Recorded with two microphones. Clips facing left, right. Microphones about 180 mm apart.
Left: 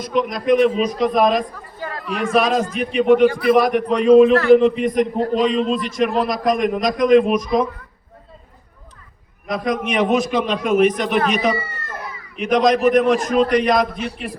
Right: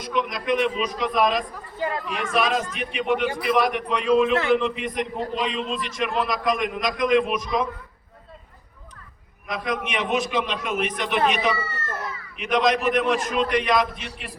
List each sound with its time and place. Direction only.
0.0 s a man's voice: 40° left (ahead or behind)
9.5 s a man's voice: 40° left (ahead or behind)
11.5 s cat: 15° left (ahead or behind)
12.4 s a man's voice: 40° left (ahead or behind)